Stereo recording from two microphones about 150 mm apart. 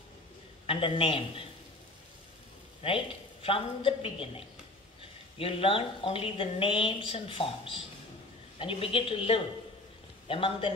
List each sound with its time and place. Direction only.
0.7 s a woman's voice: 35° left (ahead or behind)
2.8 s a woman's voice: 40° left (ahead or behind)